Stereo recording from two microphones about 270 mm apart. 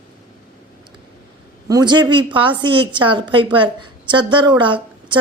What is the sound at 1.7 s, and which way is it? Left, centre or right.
A woman's voice, centre.